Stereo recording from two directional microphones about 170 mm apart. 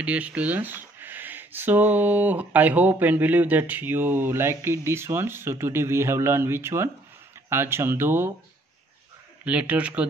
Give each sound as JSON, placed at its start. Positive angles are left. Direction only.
{"t": 0.0, "sound": "speech", "side_deg": -10}
{"t": 9.4, "sound": "speech", "side_deg": -5}